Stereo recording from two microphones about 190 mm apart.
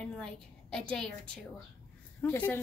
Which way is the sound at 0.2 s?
5° left (ahead or behind).